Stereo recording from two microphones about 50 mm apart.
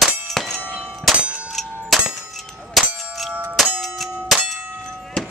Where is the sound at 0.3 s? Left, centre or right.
Centre.